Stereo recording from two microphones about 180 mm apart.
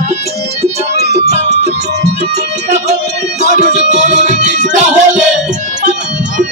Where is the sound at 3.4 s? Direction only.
40° right (ahead or behind).